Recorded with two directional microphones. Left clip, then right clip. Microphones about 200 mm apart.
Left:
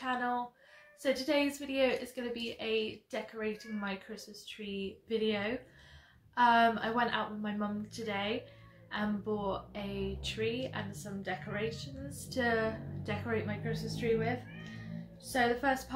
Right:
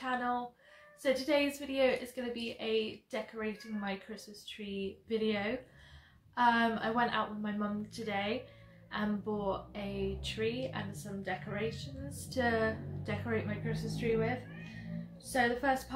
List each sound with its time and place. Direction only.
0.0 s speech: 5° left (ahead or behind)
15.3 s speech: centre (ahead or behind)